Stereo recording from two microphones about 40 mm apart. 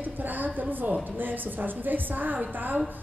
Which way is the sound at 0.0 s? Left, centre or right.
Right.